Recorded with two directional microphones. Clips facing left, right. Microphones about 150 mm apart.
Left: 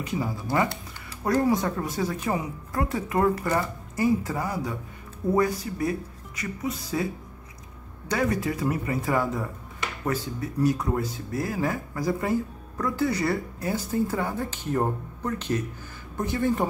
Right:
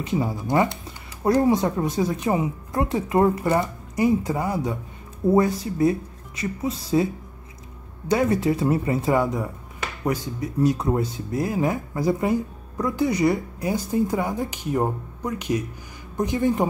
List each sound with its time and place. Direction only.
0.0 s speech: 25° right (ahead or behind)
8.1 s speech: 25° right (ahead or behind)